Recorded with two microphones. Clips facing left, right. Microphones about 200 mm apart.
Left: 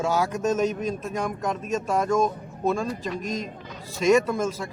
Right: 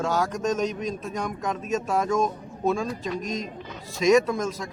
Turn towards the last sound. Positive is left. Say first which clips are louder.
# left 1 dB
turn(degrees=5)  # may be behind; listen again after turning